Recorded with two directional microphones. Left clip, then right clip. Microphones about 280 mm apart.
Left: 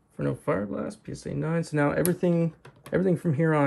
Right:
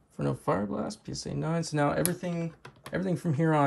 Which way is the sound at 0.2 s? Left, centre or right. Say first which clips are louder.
Left 2 dB; centre.